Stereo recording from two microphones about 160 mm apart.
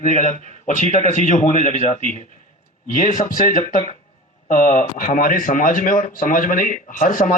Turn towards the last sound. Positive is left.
turn(degrees=55)  # may be behind; listen again after turning